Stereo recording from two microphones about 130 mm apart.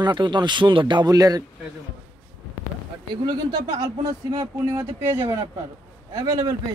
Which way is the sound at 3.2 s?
30° right (ahead or behind).